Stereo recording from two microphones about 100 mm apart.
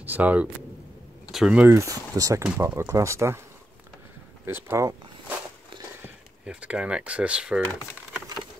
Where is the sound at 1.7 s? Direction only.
35° right (ahead or behind).